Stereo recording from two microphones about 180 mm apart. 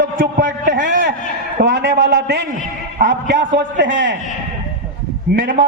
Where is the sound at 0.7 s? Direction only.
85° right.